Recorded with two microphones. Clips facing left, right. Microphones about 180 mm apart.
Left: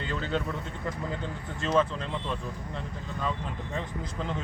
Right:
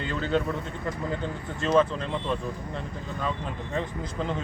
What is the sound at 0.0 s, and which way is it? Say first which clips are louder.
Speech: right 4 dB; centre (ahead or behind).